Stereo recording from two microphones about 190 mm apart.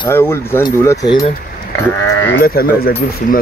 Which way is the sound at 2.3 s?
50° left (ahead or behind).